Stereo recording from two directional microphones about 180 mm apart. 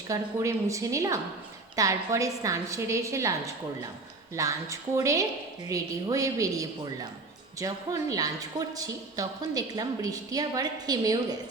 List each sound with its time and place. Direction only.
0.1 s a woman's voice: 20° right (ahead or behind)